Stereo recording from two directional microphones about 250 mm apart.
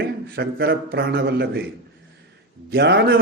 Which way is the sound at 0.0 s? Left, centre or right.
Right.